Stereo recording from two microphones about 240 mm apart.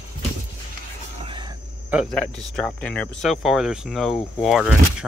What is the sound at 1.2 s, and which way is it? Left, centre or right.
Vehicle, right.